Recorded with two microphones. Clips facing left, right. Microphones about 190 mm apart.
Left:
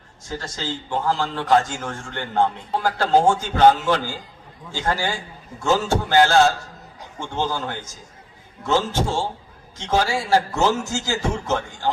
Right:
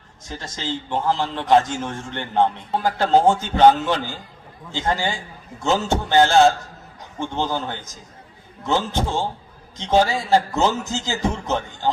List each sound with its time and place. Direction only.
0.3 s a man's voice: 20° right (ahead or behind)